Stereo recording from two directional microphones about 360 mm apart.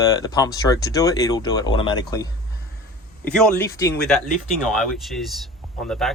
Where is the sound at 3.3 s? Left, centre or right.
Centre.